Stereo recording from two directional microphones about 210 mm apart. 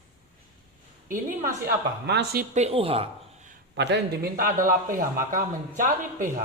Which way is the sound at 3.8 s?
50° right (ahead or behind).